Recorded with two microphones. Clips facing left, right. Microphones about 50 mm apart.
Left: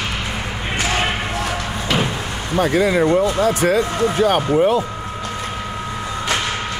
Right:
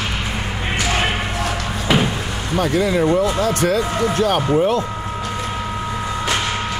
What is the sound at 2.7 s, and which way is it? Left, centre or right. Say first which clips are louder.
Speech: left 1 dB; left.